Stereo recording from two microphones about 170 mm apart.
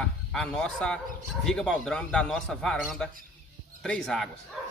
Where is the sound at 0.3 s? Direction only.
5° left (ahead or behind).